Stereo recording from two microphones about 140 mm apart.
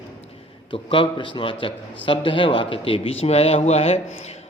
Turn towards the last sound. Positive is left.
turn(degrees=50)  # may be behind; listen again after turning